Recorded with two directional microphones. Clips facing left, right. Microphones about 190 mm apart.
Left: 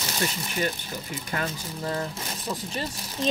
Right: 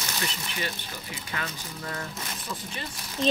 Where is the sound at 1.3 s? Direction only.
40° left (ahead or behind).